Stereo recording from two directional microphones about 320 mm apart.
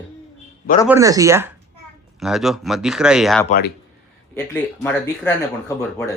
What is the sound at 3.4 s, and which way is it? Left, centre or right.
Speech, left.